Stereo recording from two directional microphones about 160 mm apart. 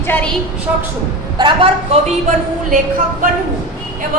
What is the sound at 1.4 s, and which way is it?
Speech, 25° right (ahead or behind).